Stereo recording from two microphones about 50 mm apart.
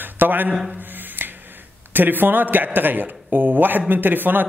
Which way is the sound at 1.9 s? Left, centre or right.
Right.